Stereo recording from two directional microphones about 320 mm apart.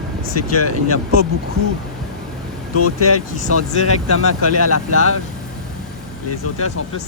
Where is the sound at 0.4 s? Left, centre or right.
Left.